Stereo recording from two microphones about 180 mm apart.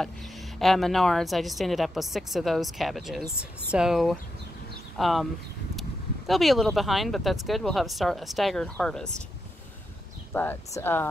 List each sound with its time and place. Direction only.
0.6 s speech: centre (ahead or behind)
10.3 s speech: 10° left (ahead or behind)